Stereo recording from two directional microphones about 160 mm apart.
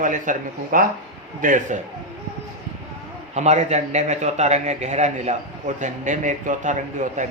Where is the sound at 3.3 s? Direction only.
45° right (ahead or behind).